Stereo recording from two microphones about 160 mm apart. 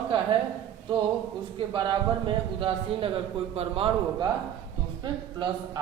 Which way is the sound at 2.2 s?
35° right (ahead or behind).